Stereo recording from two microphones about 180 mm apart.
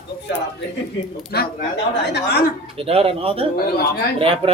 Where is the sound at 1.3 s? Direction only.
60° left (ahead or behind).